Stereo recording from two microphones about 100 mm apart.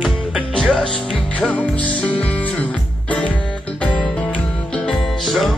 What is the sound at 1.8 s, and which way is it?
Music, 15° left (ahead or behind).